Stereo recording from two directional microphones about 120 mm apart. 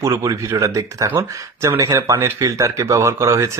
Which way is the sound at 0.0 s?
30° right (ahead or behind).